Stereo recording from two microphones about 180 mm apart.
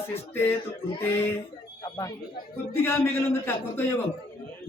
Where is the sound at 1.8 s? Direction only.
20° left (ahead or behind).